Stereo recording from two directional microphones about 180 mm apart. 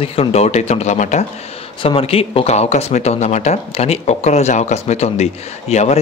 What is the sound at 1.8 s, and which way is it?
A man's voice, 30° left (ahead or behind).